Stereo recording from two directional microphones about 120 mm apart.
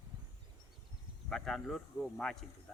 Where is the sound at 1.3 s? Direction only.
5° left (ahead or behind).